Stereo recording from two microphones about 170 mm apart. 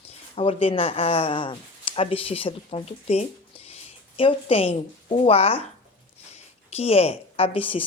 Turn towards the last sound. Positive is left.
turn(degrees=35)  # may be behind; listen again after turning